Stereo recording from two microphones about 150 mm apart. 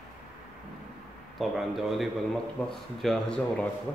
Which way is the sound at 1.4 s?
Centre (ahead or behind).